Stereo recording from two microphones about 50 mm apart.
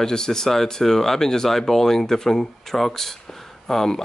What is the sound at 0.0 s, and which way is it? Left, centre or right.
Speech, centre.